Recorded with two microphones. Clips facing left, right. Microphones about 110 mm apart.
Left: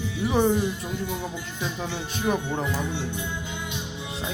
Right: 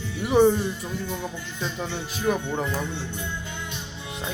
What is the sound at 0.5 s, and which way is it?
Music, 15° left (ahead or behind).